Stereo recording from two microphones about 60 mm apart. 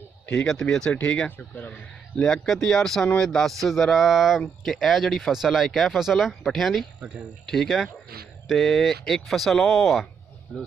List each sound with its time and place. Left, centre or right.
0.5 s speech: centre
2.3 s speech: centre
10.5 s speech: centre